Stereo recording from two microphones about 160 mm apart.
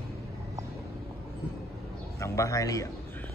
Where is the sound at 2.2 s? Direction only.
20° left (ahead or behind).